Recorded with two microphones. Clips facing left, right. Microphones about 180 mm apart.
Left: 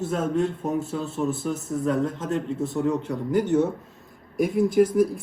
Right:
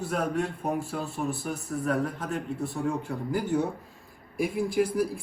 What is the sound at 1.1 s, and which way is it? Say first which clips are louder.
Speech: left 7 dB; 20° left (ahead or behind).